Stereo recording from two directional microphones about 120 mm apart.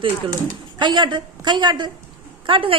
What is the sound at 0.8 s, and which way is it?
A woman's voice, 40° right (ahead or behind).